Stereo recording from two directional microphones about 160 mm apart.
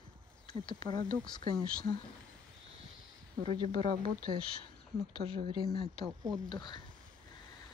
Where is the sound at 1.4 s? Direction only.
60° right (ahead or behind).